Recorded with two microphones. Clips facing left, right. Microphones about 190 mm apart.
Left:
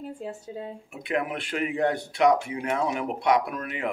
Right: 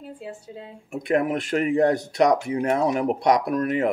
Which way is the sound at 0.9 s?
45° right (ahead or behind).